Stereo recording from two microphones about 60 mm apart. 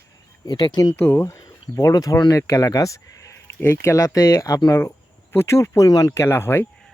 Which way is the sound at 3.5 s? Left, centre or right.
Left.